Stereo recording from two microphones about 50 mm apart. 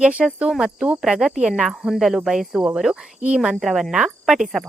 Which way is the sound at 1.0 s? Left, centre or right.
Centre.